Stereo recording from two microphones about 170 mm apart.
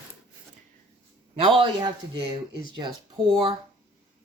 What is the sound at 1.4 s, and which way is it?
A woman's voice, 30° right (ahead or behind).